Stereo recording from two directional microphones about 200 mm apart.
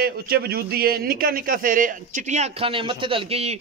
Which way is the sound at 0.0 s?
50° right (ahead or behind).